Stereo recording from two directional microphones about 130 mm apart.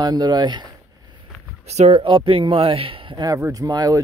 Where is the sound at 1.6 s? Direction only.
55° right (ahead or behind).